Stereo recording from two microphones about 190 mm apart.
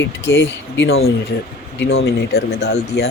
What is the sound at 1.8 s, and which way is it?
Speech, 70° left (ahead or behind).